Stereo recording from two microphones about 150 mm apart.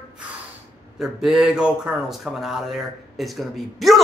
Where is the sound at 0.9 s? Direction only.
Centre (ahead or behind).